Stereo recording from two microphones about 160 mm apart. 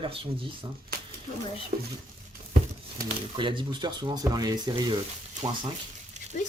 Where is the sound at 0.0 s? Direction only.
35° right (ahead or behind).